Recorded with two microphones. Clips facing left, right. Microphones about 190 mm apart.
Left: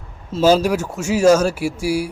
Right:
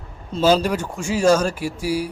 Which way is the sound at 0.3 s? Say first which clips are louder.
Left 3 dB; 5° left (ahead or behind).